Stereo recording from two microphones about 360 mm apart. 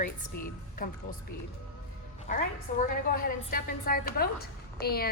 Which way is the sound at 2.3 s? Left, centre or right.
Left.